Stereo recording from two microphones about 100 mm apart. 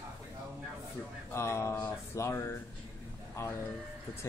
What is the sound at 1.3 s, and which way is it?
Speech, 30° left (ahead or behind).